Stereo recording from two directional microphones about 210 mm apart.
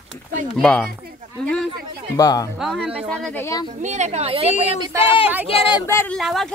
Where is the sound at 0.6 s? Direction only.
5° left (ahead or behind).